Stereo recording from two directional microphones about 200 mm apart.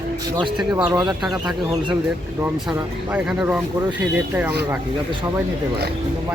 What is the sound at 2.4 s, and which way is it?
Speech, 5° right (ahead or behind).